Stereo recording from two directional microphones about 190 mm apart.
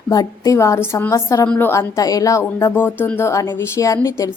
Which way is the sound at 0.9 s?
15° left (ahead or behind).